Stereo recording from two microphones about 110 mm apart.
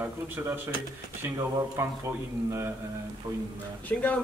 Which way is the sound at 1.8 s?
25° right (ahead or behind).